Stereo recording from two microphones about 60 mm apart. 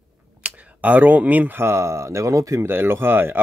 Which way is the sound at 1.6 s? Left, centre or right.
Right.